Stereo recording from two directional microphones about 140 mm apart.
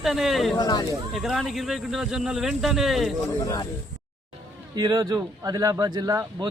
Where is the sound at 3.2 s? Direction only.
25° left (ahead or behind).